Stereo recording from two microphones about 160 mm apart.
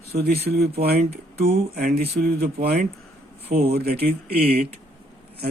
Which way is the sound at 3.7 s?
80° right.